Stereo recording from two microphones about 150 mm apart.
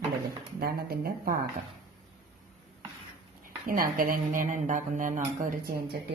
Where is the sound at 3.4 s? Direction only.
70° right (ahead or behind).